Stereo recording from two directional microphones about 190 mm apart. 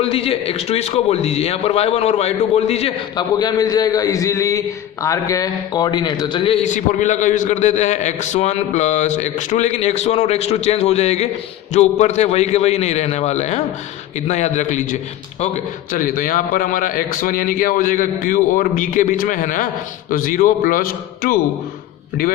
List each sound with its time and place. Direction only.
0.0 s a man's voice: 30° left (ahead or behind)
3.3 s a man's voice: 20° left (ahead or behind); by 21.3 s 50° left (ahead or behind)